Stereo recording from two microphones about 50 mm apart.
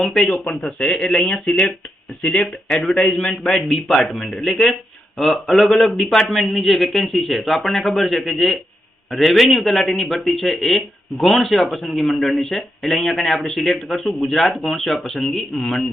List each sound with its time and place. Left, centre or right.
0.0 s a man's voice: centre
0.3 s a man's voice: left; by 15.9 s centre